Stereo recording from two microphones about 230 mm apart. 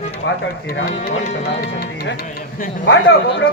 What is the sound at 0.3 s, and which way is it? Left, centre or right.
Speech, left.